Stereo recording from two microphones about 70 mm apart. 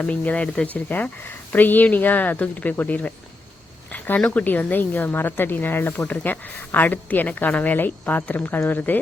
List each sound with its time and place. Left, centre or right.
0.0 s a woman's voice: left
3.9 s a sound: left
4.4 s a woman's voice: left